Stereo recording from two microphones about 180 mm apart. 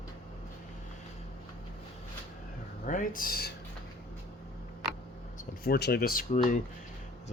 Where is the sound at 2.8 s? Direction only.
50° left (ahead or behind).